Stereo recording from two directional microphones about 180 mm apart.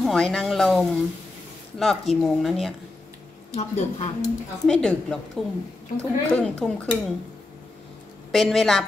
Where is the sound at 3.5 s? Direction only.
35° left (ahead or behind).